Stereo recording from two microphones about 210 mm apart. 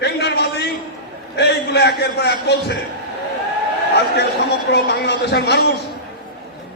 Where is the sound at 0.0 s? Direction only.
50° left (ahead or behind).